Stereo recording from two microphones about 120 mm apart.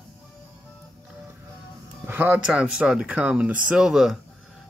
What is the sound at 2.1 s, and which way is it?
Speech, 15° right (ahead or behind).